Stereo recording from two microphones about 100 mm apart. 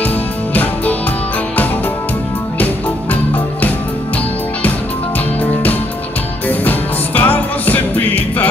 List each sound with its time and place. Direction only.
5.4 s music: 15° left (ahead or behind)